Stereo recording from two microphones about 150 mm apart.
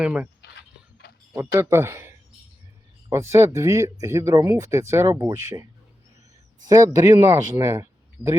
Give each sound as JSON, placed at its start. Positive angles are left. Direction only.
{"t": 0.0, "sound": "speech", "side_deg": -10}
{"t": 1.5, "sound": "speech", "side_deg": -15}
{"t": 6.7, "sound": "speech", "side_deg": -20}